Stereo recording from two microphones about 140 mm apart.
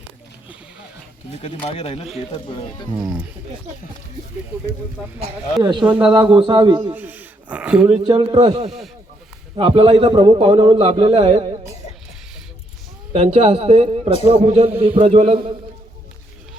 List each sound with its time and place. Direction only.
1.4 s speech: 40° left (ahead or behind)
2.9 s speech: 10° right (ahead or behind)
6.0 s a man's voice: 35° right (ahead or behind)
6.9 s speech: 15° right (ahead or behind)
8.0 s a man's voice: 30° right (ahead or behind)
8.6 s speech: 5° right (ahead or behind)
9.6 s a man's voice: 40° right (ahead or behind)
13.1 s a man's voice: 50° right (ahead or behind)
14.1 s speech: 50° left (ahead or behind)
14.4 s a man's voice: 45° right (ahead or behind)